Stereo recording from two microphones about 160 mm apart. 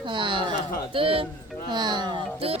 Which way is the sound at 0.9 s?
35° right (ahead or behind).